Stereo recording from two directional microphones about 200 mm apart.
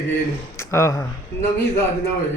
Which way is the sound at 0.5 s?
15° left (ahead or behind).